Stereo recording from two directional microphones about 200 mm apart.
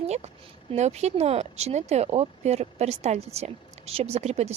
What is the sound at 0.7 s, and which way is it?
Speech, 35° right (ahead or behind).